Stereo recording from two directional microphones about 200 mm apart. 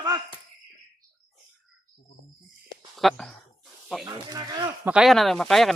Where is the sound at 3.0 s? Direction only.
Centre (ahead or behind).